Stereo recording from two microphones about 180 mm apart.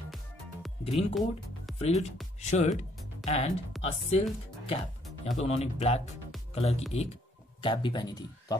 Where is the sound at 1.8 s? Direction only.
35° left (ahead or behind).